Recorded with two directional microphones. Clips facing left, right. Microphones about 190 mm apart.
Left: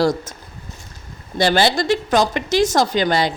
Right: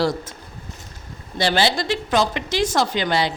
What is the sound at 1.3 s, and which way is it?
A woman's voice, 45° left (ahead or behind).